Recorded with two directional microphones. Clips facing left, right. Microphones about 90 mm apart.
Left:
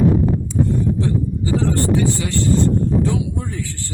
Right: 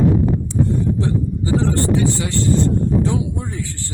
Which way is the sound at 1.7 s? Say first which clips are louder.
Even; 25° right (ahead or behind).